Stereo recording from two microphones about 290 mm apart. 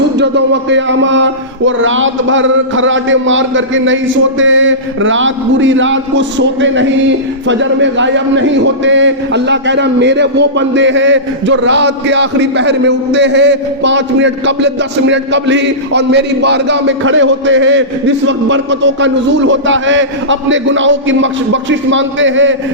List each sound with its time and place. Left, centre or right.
0.2 s a man's voice: right